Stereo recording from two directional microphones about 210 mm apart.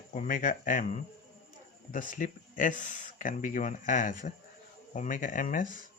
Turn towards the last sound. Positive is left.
turn(degrees=40)  # may be behind; listen again after turning